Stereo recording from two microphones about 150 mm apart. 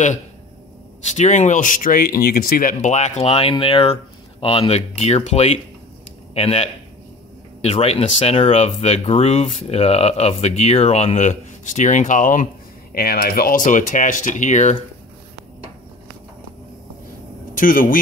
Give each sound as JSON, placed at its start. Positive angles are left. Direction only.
{"t": 1.1, "sound": "speech", "side_deg": 50}
{"t": 12.9, "sound": "speech", "side_deg": 90}
{"t": 17.6, "sound": "speech", "side_deg": 65}